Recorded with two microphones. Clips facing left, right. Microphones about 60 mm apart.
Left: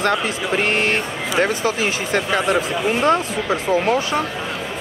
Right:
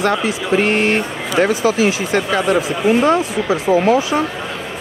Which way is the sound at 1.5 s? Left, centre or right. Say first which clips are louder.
Right 5 dB; left.